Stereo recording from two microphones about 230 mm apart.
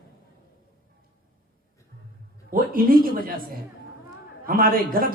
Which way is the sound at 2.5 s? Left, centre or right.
Right.